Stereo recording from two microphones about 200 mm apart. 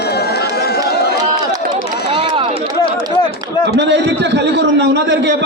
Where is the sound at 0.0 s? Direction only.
55° left (ahead or behind).